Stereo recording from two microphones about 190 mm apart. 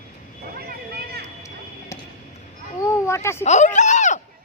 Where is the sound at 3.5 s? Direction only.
40° left (ahead or behind).